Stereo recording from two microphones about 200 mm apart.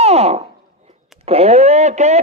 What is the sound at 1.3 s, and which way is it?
Radio, 30° right (ahead or behind).